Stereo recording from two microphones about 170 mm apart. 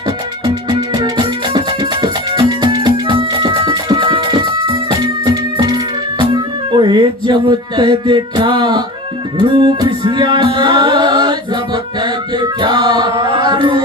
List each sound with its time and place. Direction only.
0.4 s music: 25° right (ahead or behind)
12.4 s music: 25° right (ahead or behind)